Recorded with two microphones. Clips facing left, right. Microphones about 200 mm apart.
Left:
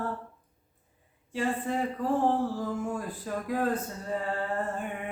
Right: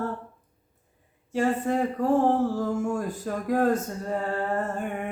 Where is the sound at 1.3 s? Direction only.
45° right (ahead or behind).